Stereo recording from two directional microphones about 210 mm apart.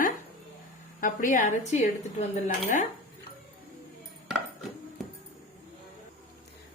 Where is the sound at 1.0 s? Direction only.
40° left (ahead or behind).